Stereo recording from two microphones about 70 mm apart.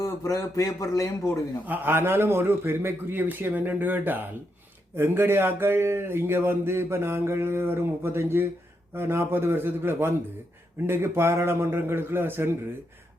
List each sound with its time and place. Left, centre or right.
0.0 s speech: left
1.6 s a man's voice: right